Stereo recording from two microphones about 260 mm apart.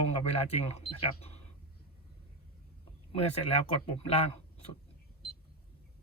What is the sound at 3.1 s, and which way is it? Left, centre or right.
Speech, left.